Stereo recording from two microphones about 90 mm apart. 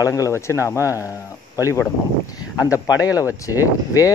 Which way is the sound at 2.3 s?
40° left (ahead or behind).